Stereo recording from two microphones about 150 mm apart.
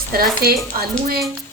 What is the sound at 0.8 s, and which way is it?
Speech, 90° right.